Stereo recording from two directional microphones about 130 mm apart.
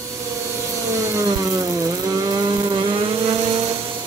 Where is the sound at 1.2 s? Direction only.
25° right (ahead or behind).